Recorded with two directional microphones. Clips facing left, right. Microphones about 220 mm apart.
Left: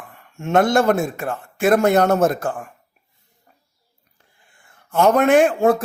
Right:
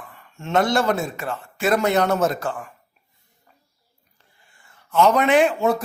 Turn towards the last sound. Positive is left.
turn(degrees=50)  # may be behind; listen again after turning